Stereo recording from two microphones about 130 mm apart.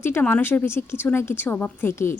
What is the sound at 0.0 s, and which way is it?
A woman's voice, 15° left (ahead or behind).